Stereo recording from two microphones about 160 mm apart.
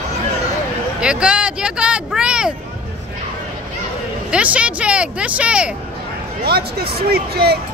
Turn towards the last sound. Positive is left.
turn(degrees=-90)